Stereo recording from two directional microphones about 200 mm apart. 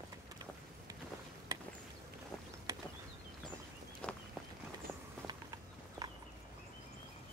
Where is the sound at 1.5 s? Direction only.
20° right (ahead or behind).